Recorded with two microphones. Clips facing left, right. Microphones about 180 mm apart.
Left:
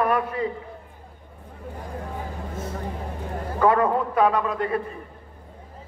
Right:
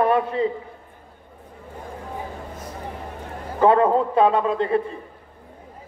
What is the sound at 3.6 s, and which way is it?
A man's voice, 25° right (ahead or behind).